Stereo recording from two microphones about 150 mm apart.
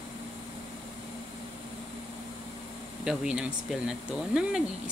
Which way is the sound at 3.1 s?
5° right (ahead or behind).